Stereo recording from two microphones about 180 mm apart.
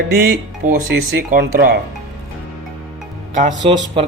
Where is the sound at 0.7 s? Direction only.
50° right (ahead or behind).